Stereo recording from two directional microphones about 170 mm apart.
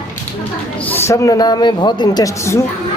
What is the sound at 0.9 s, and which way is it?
Speech, 15° left (ahead or behind).